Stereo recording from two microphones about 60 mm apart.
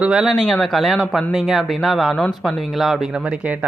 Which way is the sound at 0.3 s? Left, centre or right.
Centre.